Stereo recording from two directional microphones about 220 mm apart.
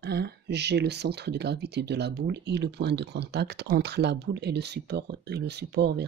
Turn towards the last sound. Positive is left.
turn(degrees=-50)  # may be behind; listen again after turning